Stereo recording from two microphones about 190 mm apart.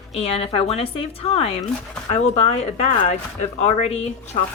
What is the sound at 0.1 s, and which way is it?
A woman's voice, 35° left (ahead or behind).